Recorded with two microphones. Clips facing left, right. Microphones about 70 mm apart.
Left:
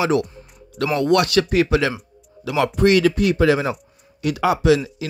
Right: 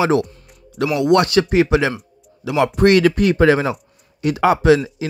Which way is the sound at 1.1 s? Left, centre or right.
Right.